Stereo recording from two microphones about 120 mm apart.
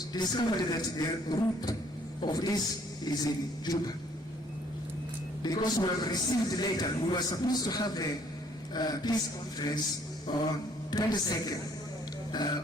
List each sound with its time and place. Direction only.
0.1 s a man's voice: 35° left (ahead or behind)
5.4 s a man's voice: 35° left (ahead or behind)
10.3 s a man's voice: 40° left (ahead or behind)